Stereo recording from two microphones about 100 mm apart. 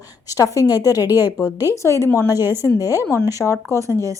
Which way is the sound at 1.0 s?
20° right (ahead or behind).